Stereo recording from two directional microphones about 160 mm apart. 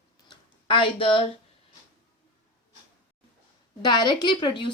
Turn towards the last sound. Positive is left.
turn(degrees=30)  # may be behind; listen again after turning